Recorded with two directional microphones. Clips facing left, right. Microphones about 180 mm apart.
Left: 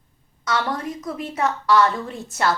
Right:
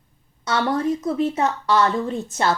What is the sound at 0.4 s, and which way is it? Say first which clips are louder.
A woman's voice: right 4 dB; 30° right (ahead or behind).